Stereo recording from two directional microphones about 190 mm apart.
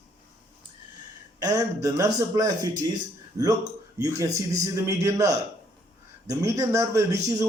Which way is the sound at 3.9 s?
15° right (ahead or behind).